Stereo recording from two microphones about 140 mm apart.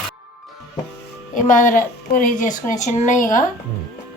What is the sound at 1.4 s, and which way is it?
A woman's voice, 70° left (ahead or behind).